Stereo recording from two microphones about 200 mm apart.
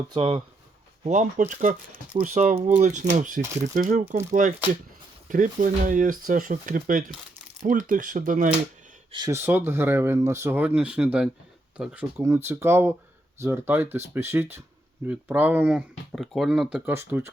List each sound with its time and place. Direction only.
0.1 s speech: 25° right (ahead or behind)
1.0 s speech: 40° right (ahead or behind)
9.1 s speech: 20° right (ahead or behind)